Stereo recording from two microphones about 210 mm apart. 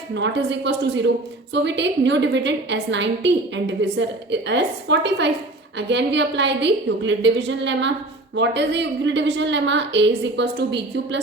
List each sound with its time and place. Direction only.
0.1 s a woman's voice: 60° right (ahead or behind)